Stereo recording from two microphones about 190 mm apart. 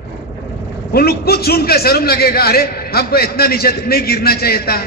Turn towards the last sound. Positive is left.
turn(degrees=55)  # may be behind; listen again after turning